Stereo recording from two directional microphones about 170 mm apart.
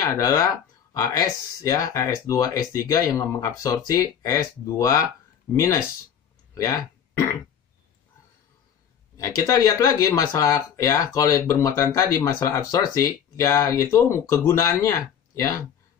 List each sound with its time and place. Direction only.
0.0 s speech: 20° left (ahead or behind)
6.5 s a sound: 20° left (ahead or behind)
9.1 s speech: 20° left (ahead or behind)